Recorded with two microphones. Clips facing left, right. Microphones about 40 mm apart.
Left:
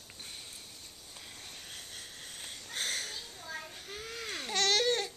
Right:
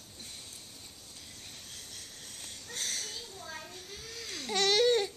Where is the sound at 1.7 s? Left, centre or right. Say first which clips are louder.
Left 2 dB; left.